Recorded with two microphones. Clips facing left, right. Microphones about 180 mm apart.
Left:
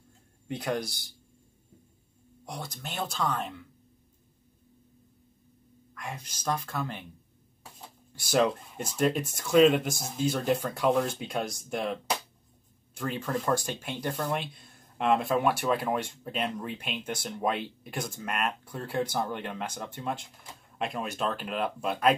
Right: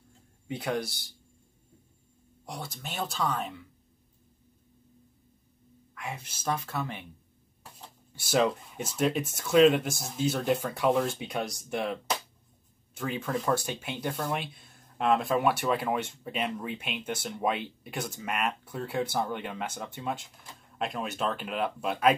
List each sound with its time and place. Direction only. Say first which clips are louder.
0.5 s speech: even; centre (ahead or behind)
2.4 s speech: even; centre (ahead or behind)
5.9 s speech: right 1 dB; 5° right (ahead or behind)
8.3 s speech: left 1 dB; centre (ahead or behind)